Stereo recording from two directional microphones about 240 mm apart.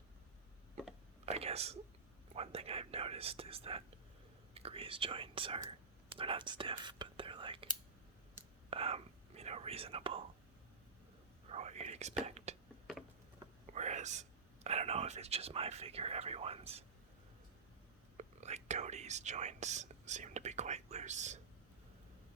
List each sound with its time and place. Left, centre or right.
1.2 s whispering: right
2.3 s speech: right
8.7 s whispering: right
11.5 s whispering: right
13.7 s speech: right
18.2 s speech: right